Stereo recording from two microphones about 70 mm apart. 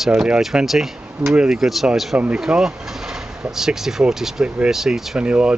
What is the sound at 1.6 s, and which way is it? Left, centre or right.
Speech, centre.